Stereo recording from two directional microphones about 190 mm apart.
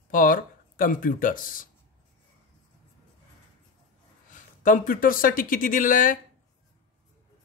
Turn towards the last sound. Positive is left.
turn(degrees=45)  # may be behind; listen again after turning